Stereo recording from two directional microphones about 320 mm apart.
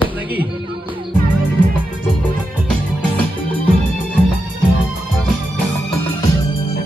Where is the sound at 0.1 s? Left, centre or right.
Centre.